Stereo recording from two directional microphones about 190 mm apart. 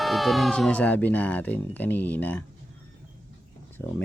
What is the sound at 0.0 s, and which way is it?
Speech, centre (ahead or behind).